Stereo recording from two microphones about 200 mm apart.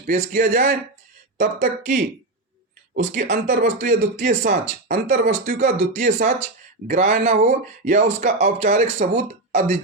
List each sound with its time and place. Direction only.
0.0 s speech: 45° right (ahead or behind)
3.2 s speech: 45° right (ahead or behind)